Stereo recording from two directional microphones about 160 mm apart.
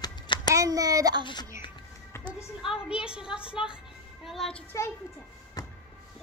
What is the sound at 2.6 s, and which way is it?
Speech, 5° right (ahead or behind).